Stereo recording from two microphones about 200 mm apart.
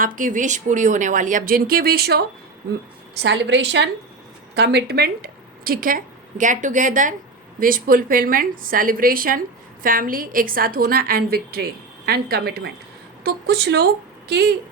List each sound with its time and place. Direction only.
0.0 s speech: 40° right (ahead or behind)
3.2 s a woman's voice: 65° right (ahead or behind)